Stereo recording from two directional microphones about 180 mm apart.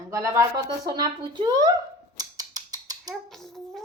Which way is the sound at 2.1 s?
20° right (ahead or behind).